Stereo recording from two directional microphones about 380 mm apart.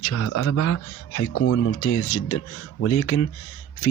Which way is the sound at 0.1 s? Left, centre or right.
Left.